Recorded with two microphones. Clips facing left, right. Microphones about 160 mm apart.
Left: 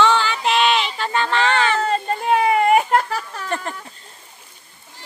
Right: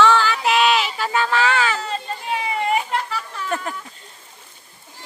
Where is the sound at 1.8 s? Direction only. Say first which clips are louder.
Left 7 dB; 55° left (ahead or behind).